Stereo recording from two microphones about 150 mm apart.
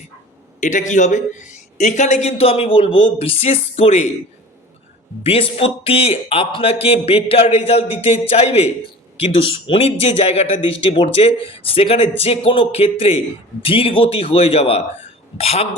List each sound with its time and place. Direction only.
0.6 s a man's voice: 55° left (ahead or behind)
5.2 s a man's voice: 40° left (ahead or behind)